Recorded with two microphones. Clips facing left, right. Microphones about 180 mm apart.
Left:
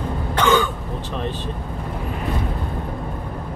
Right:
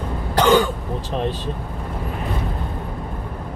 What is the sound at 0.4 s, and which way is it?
Throat clearing, 35° right (ahead or behind).